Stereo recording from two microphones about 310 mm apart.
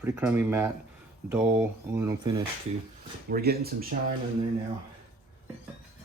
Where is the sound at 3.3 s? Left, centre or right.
Right.